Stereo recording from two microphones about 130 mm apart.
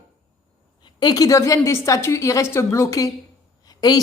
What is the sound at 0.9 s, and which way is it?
A woman's voice, 30° left (ahead or behind).